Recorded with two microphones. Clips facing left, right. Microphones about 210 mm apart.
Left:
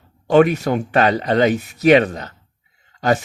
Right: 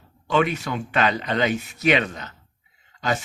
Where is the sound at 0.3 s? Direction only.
40° left (ahead or behind).